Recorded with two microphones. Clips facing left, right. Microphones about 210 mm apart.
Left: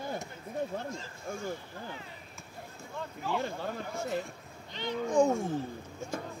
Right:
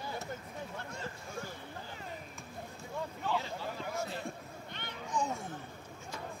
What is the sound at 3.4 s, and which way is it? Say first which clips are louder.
Speech: left 5 dB; 55° left (ahead or behind).